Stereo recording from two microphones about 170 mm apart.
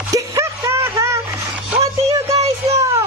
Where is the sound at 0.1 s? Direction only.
20° right (ahead or behind).